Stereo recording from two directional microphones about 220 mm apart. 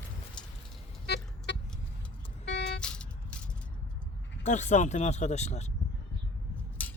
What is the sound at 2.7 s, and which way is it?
Vehicle, 5° left (ahead or behind).